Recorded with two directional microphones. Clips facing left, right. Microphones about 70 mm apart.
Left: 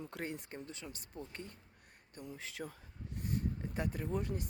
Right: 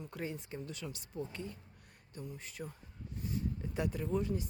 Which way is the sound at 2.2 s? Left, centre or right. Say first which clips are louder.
Left 1 dB; left.